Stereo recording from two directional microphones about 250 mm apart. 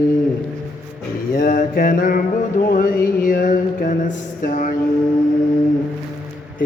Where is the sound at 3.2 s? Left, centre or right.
Left.